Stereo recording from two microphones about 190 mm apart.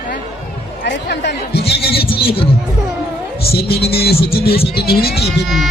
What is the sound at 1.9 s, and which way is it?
Music, 30° left (ahead or behind).